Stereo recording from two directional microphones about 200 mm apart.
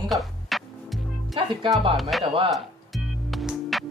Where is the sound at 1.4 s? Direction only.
25° right (ahead or behind).